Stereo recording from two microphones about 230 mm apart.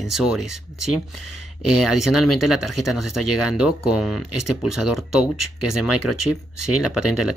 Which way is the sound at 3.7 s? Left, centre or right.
Centre.